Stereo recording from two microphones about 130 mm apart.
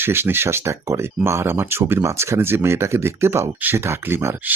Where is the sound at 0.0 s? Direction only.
15° right (ahead or behind).